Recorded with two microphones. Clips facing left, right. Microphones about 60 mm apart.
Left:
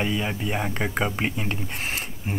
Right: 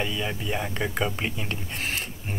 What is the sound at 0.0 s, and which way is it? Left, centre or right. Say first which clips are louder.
Speech: left 3 dB; centre.